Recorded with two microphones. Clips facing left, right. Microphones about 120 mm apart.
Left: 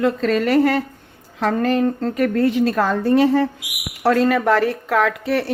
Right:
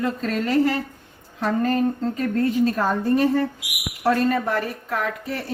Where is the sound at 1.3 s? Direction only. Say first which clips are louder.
Left 3 dB; 90° left.